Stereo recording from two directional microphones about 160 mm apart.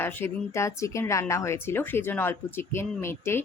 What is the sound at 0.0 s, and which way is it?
A woman's voice, 15° left (ahead or behind).